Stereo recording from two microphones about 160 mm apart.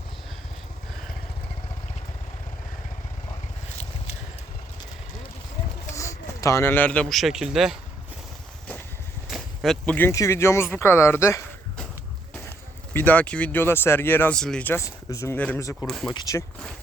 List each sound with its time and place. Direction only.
5.9 s speech: 20° left (ahead or behind); by 7.8 s 5° right (ahead or behind)
9.3 s speech: centre (ahead or behind); by 11.4 s 15° left (ahead or behind)
12.9 s speech: 10° left (ahead or behind)